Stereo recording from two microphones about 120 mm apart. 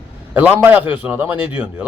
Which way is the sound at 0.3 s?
15° right (ahead or behind).